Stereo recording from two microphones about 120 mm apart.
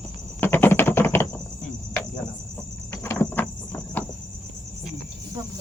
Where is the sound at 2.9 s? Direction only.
20° left (ahead or behind).